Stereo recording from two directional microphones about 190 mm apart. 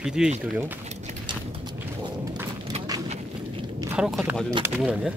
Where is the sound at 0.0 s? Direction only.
5° right (ahead or behind).